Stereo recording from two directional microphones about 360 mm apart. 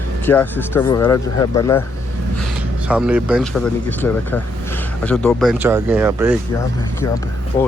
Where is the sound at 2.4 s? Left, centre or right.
Centre.